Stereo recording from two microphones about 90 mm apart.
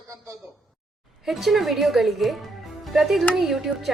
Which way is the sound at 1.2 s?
Centre (ahead or behind).